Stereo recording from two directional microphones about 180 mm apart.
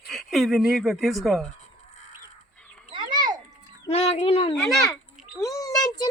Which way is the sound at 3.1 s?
20° right (ahead or behind).